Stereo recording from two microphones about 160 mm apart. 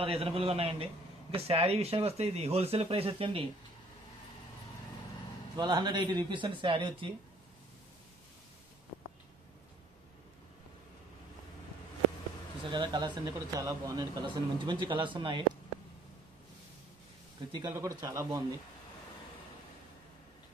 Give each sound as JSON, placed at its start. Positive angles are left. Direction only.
{"t": 0.0, "sound": "speech", "side_deg": -40}
{"t": 5.6, "sound": "speech", "side_deg": -25}
{"t": 12.6, "sound": "speech", "side_deg": -30}
{"t": 17.5, "sound": "speech", "side_deg": -20}